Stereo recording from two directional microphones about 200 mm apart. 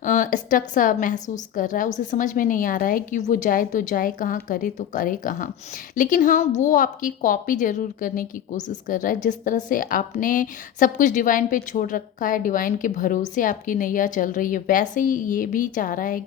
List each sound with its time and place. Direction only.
0.0 s a woman's voice: 40° left (ahead or behind)